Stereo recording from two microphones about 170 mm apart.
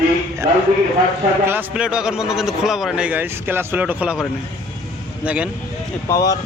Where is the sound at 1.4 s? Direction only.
10° right (ahead or behind).